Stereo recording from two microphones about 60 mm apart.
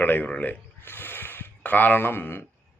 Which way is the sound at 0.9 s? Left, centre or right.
Left.